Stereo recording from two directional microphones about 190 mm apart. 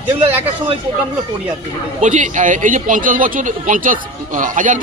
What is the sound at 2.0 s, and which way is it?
Speech, 40° right (ahead or behind).